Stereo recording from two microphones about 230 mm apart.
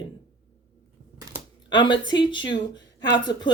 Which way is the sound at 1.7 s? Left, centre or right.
Centre.